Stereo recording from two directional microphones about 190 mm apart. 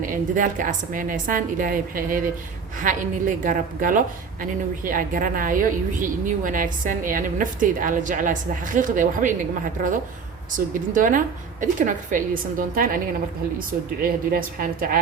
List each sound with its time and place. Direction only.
0.0 s a woman's voice: 45° right (ahead or behind)
10.9 s a woman's voice: 45° right (ahead or behind)
14.0 s a woman's voice: 50° right (ahead or behind)